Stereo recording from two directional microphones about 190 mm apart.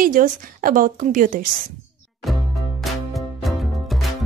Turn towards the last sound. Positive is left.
turn(degrees=0)  # may be behind; listen again after turning